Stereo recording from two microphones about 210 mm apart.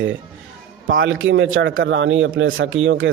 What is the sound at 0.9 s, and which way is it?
A man's voice, 65° right (ahead or behind).